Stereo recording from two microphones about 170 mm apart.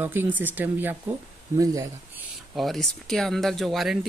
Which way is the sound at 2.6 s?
Centre (ahead or behind).